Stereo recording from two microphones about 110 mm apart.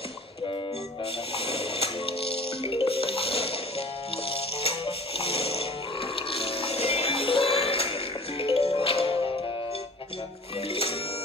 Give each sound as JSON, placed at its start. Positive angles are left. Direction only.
{"t": 1.3, "sound": "music", "side_deg": 65}
{"t": 10.7, "sound": "music", "side_deg": 60}